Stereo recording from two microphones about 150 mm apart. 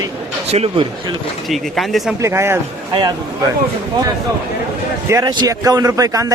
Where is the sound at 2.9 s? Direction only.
30° right (ahead or behind).